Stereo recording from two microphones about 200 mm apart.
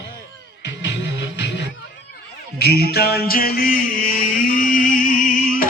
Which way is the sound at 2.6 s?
50° left (ahead or behind).